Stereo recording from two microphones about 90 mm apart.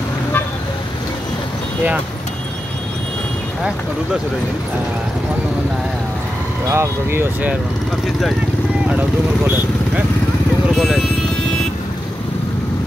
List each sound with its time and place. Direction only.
6.7 s speech: 30° right (ahead or behind)
10.8 s music: 5° right (ahead or behind)